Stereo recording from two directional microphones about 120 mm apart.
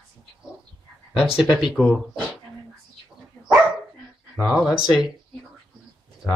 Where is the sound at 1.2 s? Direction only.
Centre (ahead or behind).